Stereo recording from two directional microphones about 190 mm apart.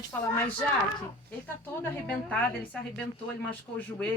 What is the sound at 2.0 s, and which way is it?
A woman's voice, 5° left (ahead or behind).